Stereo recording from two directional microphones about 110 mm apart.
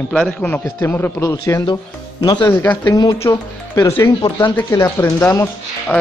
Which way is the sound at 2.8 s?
40° left (ahead or behind).